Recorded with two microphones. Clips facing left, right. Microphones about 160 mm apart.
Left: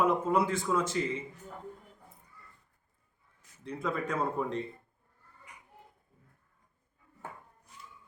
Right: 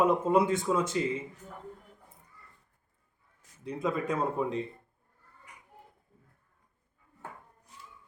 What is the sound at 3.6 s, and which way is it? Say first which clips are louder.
Speech: right 3 dB; 20° right (ahead or behind).